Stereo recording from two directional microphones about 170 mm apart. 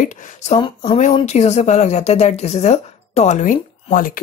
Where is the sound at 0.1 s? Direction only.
45° left (ahead or behind).